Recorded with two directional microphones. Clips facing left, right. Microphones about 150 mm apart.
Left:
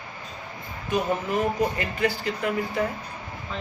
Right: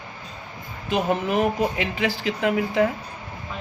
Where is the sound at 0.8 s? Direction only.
75° right (ahead or behind).